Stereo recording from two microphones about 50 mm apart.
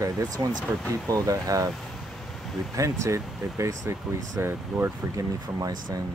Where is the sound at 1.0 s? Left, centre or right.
Right.